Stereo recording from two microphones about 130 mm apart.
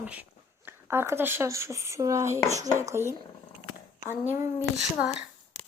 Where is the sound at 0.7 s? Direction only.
20° right (ahead or behind).